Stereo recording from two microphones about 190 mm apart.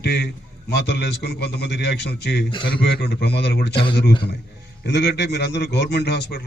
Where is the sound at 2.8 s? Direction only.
60° left (ahead or behind).